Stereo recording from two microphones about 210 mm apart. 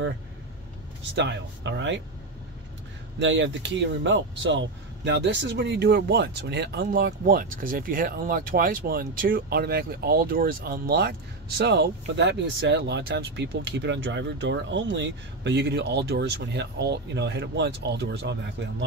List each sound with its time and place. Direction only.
1.1 s speech: 55° right (ahead or behind)
3.2 s speech: 60° right (ahead or behind)